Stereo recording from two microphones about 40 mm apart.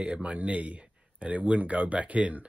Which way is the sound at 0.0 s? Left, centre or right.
Right.